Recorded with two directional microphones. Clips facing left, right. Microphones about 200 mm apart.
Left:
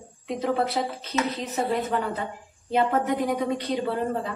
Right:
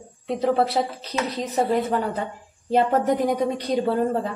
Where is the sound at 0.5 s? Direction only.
35° right (ahead or behind).